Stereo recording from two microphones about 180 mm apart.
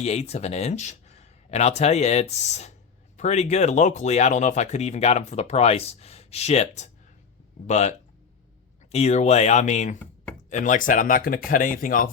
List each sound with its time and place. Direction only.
0.0 s speech: 35° left (ahead or behind)